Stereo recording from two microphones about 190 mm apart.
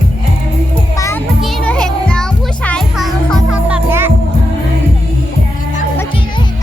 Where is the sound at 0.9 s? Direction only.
15° left (ahead or behind).